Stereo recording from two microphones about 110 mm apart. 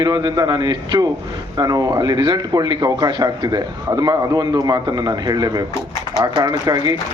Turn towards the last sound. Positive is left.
turn(degrees=-35)  # may be behind; listen again after turning